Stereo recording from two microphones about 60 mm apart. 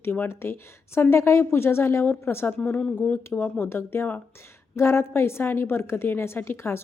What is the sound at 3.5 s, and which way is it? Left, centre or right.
A woman's voice, left.